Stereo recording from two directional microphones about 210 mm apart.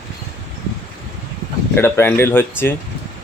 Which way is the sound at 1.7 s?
10° left (ahead or behind).